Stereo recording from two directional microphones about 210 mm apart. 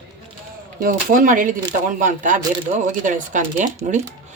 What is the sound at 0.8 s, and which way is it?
Speech, 40° right (ahead or behind).